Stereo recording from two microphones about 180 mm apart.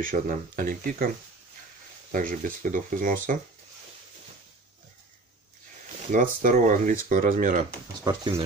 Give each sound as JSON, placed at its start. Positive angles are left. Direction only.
{"t": 0.0, "sound": "speech", "side_deg": -50}
{"t": 2.1, "sound": "speech", "side_deg": -50}
{"t": 6.1, "sound": "speech", "side_deg": -45}
{"t": 8.0, "sound": "speech", "side_deg": -20}